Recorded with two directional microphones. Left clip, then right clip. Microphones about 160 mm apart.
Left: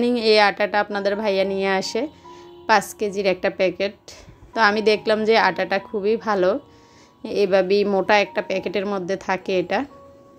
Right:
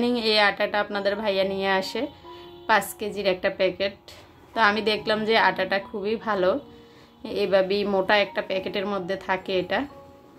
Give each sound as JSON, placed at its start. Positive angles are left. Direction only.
{"t": 0.0, "sound": "a woman's voice", "side_deg": 35}